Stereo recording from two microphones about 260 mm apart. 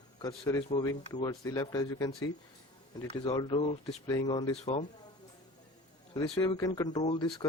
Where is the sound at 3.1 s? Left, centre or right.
Left.